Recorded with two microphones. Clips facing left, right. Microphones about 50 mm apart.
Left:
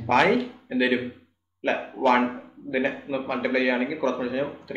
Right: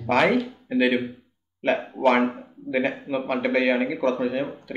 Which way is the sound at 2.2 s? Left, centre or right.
Left.